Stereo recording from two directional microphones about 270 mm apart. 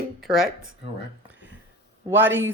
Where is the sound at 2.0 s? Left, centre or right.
Centre.